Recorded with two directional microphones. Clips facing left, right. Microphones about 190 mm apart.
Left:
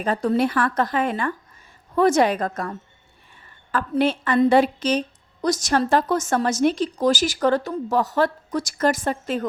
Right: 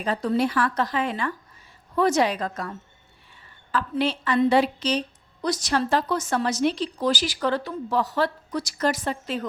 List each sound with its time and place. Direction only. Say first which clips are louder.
0.0 s a woman's voice: left 3 dB; 50° left (ahead or behind)